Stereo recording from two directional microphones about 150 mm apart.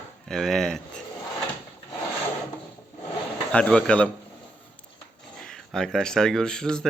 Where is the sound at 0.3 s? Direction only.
Centre (ahead or behind).